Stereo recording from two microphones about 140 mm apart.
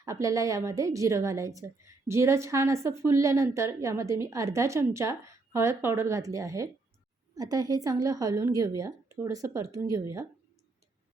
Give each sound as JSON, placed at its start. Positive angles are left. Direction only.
{"t": 0.0, "sound": "a woman's voice", "side_deg": -25}